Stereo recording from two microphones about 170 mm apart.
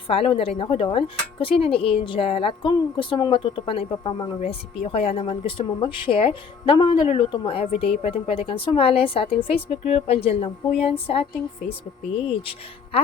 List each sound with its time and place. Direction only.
0.1 s speech: 35° left (ahead or behind)